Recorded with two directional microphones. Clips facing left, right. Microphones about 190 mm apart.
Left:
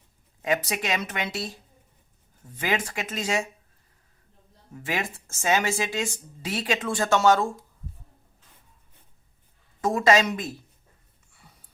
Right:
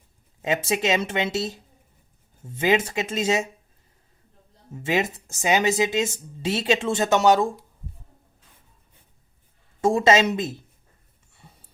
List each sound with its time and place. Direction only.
0.4 s speech: 25° right (ahead or behind)
4.7 s speech: 25° right (ahead or behind)
9.8 s speech: 25° right (ahead or behind)
11.3 s a sound: 25° right (ahead or behind)